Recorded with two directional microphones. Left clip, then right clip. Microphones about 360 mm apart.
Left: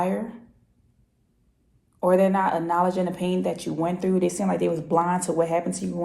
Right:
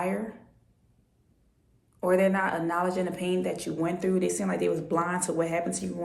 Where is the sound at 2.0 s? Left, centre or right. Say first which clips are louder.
Left 4 dB; centre.